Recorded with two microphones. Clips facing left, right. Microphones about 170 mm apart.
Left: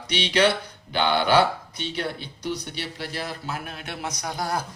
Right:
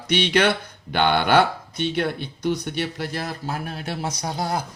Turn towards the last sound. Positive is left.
turn(degrees=-25)  # may be behind; listen again after turning